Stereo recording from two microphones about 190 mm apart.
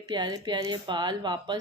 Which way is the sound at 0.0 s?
25° right (ahead or behind).